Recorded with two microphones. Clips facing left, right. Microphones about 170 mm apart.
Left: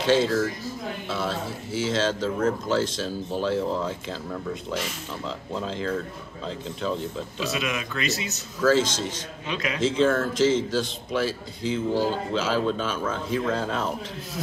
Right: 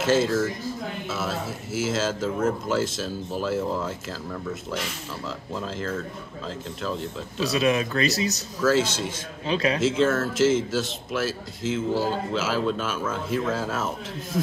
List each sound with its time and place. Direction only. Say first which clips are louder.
0.0 s speech: even; 5° right (ahead or behind)
5.5 s speech: left 2 dB; 5° right (ahead or behind)
7.3 s speech: right 8 dB; 35° right (ahead or behind)
8.5 s speech: left 1 dB; 5° right (ahead or behind)
9.5 s speech: right 6 dB; 30° right (ahead or behind)
9.8 s speech: left 5 dB; 5° right (ahead or behind)